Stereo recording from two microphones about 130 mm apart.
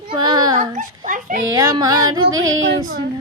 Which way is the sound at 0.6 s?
80° right.